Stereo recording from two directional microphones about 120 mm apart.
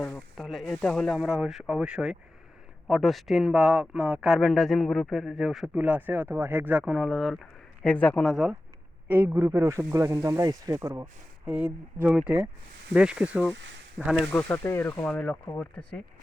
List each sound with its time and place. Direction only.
0.3 s speech: centre (ahead or behind)
7.9 s speech: 10° left (ahead or behind)
8.2 s speech: 5° right (ahead or behind)
9.0 s a man's voice: 20° right (ahead or behind)
11.4 s speech: 10° right (ahead or behind)
14.3 s speech: 10° left (ahead or behind)
15.0 s speech: 10° left (ahead or behind)